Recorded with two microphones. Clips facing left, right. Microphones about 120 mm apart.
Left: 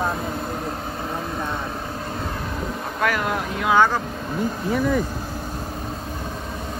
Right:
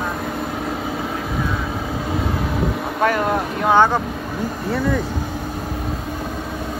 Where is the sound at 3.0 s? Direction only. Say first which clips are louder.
Right 4 dB; 35° right (ahead or behind).